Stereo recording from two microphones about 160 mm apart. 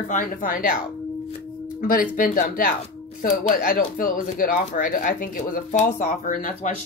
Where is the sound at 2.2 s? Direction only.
65° left (ahead or behind).